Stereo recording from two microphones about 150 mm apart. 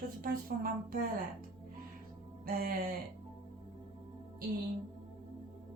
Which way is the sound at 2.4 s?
75° right (ahead or behind).